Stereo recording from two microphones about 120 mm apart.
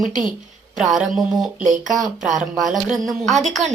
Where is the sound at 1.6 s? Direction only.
90° right.